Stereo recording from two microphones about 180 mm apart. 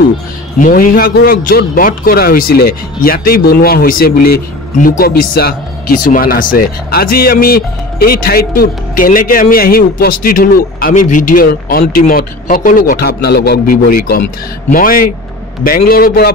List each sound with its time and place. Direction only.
0.6 s speech: 50° left (ahead or behind)